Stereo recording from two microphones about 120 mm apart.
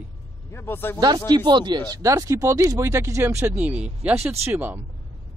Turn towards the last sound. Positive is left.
turn(degrees=-20)  # may be behind; listen again after turning